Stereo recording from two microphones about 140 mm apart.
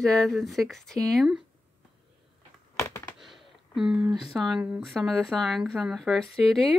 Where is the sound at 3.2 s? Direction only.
Centre (ahead or behind).